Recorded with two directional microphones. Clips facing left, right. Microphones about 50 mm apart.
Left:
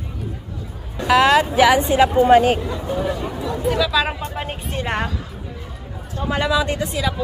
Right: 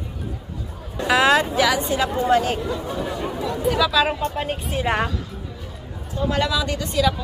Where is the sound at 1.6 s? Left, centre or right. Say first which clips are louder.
Left 6 dB; left.